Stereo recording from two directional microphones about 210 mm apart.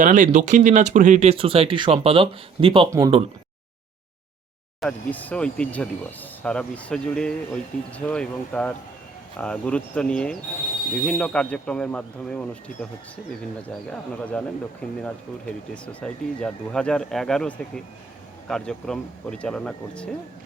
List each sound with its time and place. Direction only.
0.0 s speech: 35° right (ahead or behind)
4.8 s speech: 5° left (ahead or behind)